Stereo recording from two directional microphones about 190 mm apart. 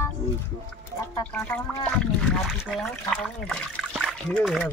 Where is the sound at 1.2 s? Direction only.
5° left (ahead or behind).